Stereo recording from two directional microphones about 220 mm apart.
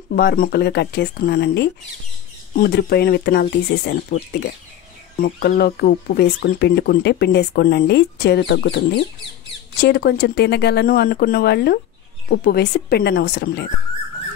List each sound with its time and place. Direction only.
0.1 s speech: 45° left (ahead or behind)
9.8 s speech: 50° left (ahead or behind)